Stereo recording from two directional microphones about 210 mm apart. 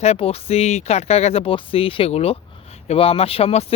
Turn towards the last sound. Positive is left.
turn(degrees=30)  # may be behind; listen again after turning